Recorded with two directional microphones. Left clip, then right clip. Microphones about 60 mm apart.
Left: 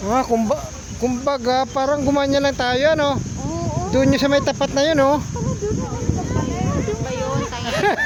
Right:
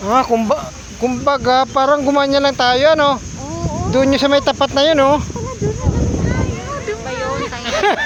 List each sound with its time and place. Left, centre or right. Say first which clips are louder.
0.1 s speech: right 5 dB; centre
2.0 s speech: right 4 dB; left
4.9 s speech: right 2 dB; left
7.7 s a sound: right 4 dB; centre